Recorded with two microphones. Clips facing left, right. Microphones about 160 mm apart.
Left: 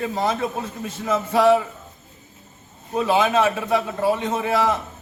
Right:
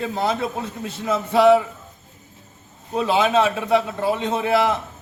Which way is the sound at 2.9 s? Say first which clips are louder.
Even; 15° right (ahead or behind).